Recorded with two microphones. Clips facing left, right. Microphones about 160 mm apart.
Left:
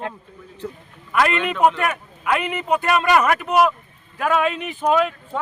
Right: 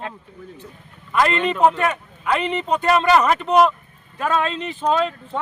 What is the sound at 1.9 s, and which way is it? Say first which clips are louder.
Speech: even; 10° left (ahead or behind).